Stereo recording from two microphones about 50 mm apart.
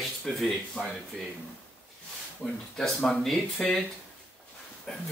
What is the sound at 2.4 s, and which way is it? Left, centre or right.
Speech, centre.